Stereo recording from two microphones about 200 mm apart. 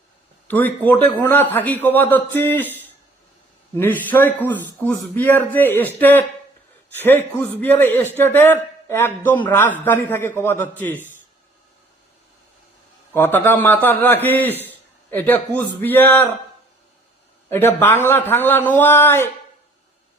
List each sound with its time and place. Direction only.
0.4 s a man's voice: 10° left (ahead or behind)
13.1 s a man's voice: 10° left (ahead or behind)
14.6 s a sound: 10° left (ahead or behind)
15.8 s a man's voice: 10° left (ahead or behind)
17.5 s a man's voice: 10° left (ahead or behind)